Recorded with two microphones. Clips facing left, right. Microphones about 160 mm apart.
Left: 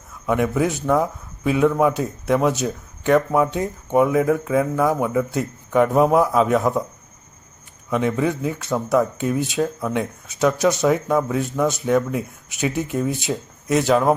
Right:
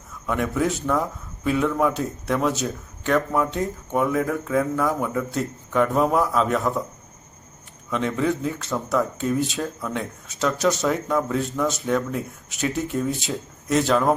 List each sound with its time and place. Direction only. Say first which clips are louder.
0.3 s a man's voice: left 3 dB; 10° left (ahead or behind)
7.9 s speech: left 3 dB; 10° left (ahead or behind)